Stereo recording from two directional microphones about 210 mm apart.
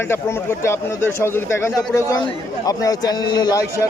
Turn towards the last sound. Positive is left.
turn(degrees=20)  # may be behind; listen again after turning